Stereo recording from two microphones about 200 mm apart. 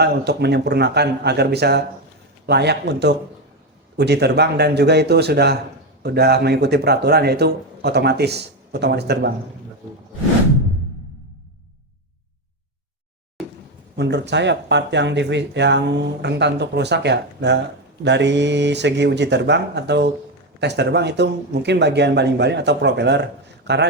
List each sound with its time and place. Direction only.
0.0 s speech: 55° right (ahead or behind)
13.9 s speech: 60° right (ahead or behind)